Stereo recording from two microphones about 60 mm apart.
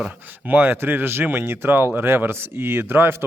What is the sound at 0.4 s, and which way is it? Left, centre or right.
Speech, right.